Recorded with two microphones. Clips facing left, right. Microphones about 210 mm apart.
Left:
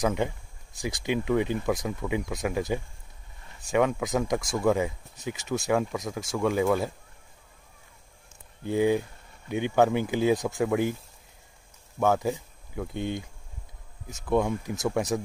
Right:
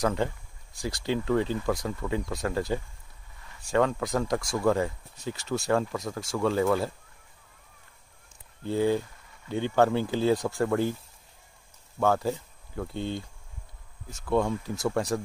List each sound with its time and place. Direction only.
0.7 s speech: 20° left (ahead or behind)
8.6 s speech: 15° left (ahead or behind)
12.0 s speech: 15° left (ahead or behind)